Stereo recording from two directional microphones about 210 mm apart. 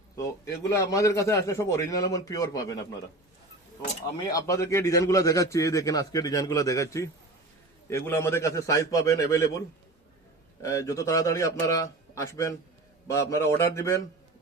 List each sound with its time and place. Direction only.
0.2 s a man's voice: 15° left (ahead or behind)
4.3 s a man's voice: 15° left (ahead or behind)